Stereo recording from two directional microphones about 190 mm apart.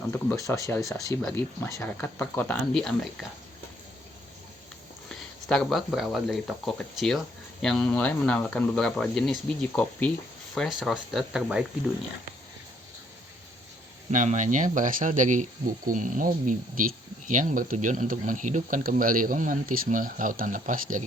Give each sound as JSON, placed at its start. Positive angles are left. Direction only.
{"t": 0.1, "sound": "speech", "side_deg": 10}
{"t": 5.0, "sound": "speech", "side_deg": 5}
{"t": 14.1, "sound": "speech", "side_deg": -45}